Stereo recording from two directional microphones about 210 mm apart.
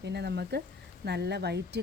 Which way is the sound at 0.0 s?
50° right (ahead or behind).